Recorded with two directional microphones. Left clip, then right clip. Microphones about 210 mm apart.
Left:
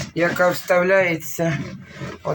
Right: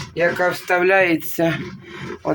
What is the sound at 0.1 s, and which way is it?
Speech, 40° right (ahead or behind).